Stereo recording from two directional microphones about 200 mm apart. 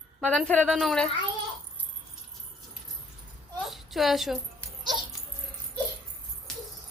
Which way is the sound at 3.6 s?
Centre (ahead or behind).